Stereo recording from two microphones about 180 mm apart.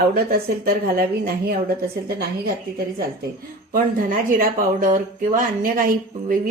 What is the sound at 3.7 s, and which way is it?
Speech, 50° right (ahead or behind).